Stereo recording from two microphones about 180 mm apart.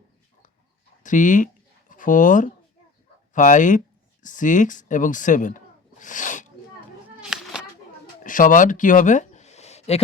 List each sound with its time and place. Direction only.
1.0 s speech: 45° left (ahead or behind)
7.2 s children playing: 5° right (ahead or behind)
8.2 s a sound: 50° left (ahead or behind)